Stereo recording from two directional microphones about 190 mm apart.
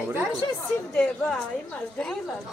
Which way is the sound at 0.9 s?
5° left (ahead or behind).